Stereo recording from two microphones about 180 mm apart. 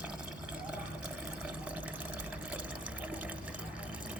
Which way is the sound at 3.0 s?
10° right (ahead or behind).